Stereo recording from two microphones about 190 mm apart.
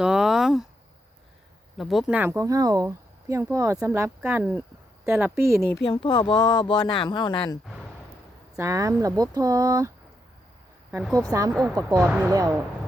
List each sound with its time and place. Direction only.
0.0 s a sound: 5° right (ahead or behind)
1.8 s speech: centre (ahead or behind)
5.9 s speech: 25° left (ahead or behind)
8.5 s speech: 15° right (ahead or behind)
11.3 s speech: 15° right (ahead or behind)
12.0 s speech: centre (ahead or behind)
12.3 s speech: 15° right (ahead or behind)